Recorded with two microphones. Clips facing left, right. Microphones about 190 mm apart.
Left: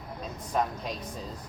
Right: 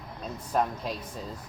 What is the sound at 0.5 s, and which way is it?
Speech, centre (ahead or behind).